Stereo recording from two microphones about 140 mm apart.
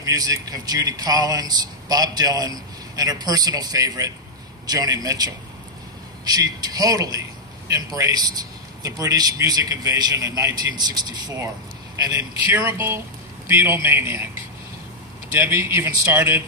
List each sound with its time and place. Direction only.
0.0 s a man's voice: 25° right (ahead or behind)
12.2 s speech: 15° right (ahead or behind)
15.3 s speech: 20° right (ahead or behind)